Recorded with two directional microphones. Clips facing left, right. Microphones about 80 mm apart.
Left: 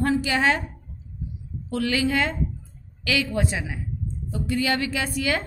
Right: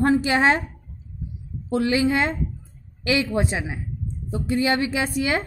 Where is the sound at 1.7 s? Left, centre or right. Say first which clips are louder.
Right 3 dB; right.